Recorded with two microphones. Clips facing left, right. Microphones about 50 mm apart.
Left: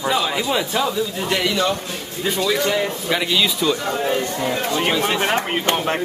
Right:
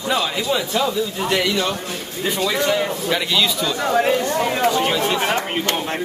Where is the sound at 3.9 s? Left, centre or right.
Right.